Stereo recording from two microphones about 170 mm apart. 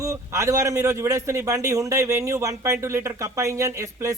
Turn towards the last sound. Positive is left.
turn(degrees=-20)  # may be behind; listen again after turning